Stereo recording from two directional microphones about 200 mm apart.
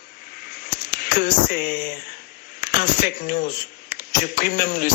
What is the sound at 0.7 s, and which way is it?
Speech, 45° left (ahead or behind).